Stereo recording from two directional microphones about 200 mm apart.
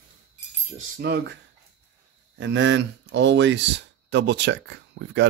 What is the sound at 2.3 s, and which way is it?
Speech, 65° right (ahead or behind).